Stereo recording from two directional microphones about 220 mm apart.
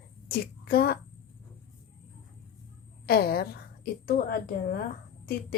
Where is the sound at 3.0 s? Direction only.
45° left (ahead or behind).